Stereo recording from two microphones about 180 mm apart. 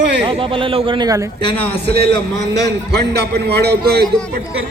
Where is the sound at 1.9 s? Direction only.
65° right (ahead or behind).